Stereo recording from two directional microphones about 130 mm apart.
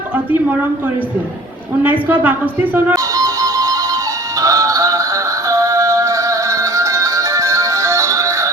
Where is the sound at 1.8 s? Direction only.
15° right (ahead or behind).